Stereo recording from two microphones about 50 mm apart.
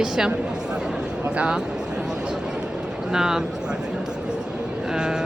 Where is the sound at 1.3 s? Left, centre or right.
Right.